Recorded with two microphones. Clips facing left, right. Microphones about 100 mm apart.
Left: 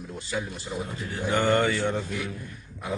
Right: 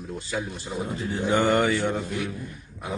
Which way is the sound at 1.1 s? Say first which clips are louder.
Right 2 dB; 20° right (ahead or behind).